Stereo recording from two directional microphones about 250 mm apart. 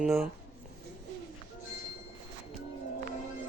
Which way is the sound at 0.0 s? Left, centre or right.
Centre.